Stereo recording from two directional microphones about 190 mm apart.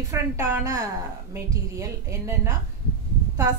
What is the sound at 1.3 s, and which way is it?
A woman's voice, 15° right (ahead or behind).